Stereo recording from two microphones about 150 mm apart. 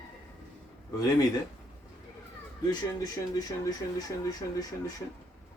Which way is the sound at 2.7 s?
25° left (ahead or behind).